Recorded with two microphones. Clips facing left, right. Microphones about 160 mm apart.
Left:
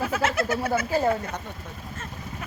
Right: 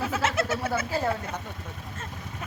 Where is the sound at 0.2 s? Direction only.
25° right (ahead or behind).